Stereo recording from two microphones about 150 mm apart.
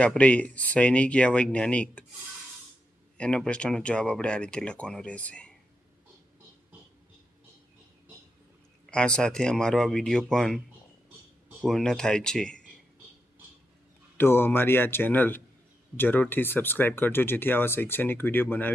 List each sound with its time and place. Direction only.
0.0 s speech: 10° left (ahead or behind)
3.2 s speech: 5° left (ahead or behind)
8.9 s speech: 5° left (ahead or behind)
11.6 s speech: 5° left (ahead or behind)
14.2 s speech: 15° left (ahead or behind)